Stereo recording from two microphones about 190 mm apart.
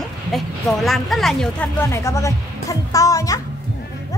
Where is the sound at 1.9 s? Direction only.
15° left (ahead or behind).